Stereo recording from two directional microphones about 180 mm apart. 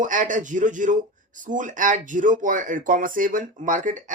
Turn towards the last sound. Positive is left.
turn(degrees=-45)  # may be behind; listen again after turning